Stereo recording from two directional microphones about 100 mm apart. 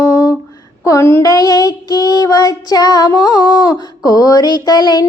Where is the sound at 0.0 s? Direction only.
35° left (ahead or behind).